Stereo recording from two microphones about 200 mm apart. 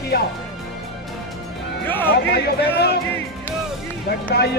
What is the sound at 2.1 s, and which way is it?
Speech, 55° left (ahead or behind).